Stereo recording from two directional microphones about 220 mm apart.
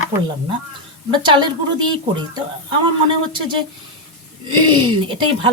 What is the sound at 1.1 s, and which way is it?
A woman's voice, 20° right (ahead or behind).